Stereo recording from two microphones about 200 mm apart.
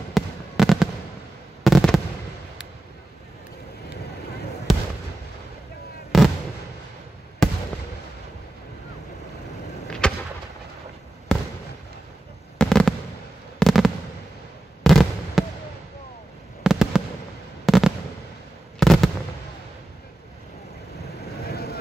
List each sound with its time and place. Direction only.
0.1 s fireworks: centre (ahead or behind)
6.1 s fireworks: centre (ahead or behind)
9.8 s a sound: 5° left (ahead or behind)
11.3 s fireworks: 5° left (ahead or behind)
12.5 s fireworks: 5° left (ahead or behind)
16.6 s fireworks: centre (ahead or behind)
21.5 s vehicle: 50° left (ahead or behind)